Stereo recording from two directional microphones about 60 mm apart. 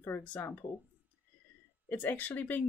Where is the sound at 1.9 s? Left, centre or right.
Left.